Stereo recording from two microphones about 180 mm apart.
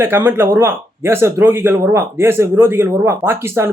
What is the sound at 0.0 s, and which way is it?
Speech, 10° right (ahead or behind).